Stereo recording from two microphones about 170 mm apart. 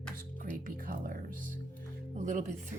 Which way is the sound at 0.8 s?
55° right (ahead or behind).